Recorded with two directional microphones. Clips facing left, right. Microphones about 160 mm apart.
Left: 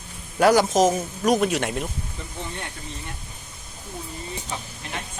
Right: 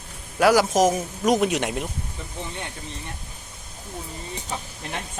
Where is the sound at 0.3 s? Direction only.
5° right (ahead or behind).